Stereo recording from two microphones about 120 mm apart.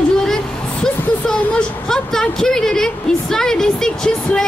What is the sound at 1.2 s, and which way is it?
A woman's voice, 5° left (ahead or behind).